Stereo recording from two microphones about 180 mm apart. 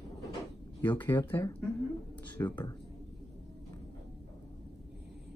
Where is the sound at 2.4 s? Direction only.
25° left (ahead or behind).